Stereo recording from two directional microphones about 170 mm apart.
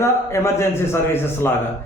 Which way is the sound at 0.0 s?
15° left (ahead or behind).